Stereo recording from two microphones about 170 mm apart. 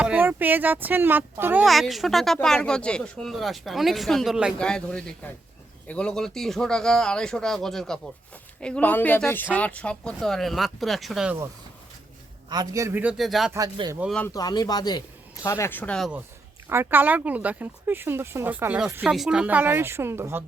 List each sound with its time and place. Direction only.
0.0 s speech: 10° right (ahead or behind)
1.6 s speech: centre (ahead or behind)
12.5 s speech: 20° right (ahead or behind); by 13.5 s centre (ahead or behind)
13.7 s speech: 20° right (ahead or behind)
14.0 s speech: 5° left (ahead or behind)
14.3 s speech: 20° left (ahead or behind); by 16.2 s centre (ahead or behind)
16.6 s speech: 15° right (ahead or behind)